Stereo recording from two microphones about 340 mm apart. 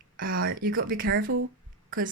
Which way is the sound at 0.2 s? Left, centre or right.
Right.